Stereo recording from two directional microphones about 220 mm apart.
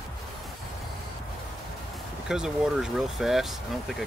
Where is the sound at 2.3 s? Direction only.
5° right (ahead or behind).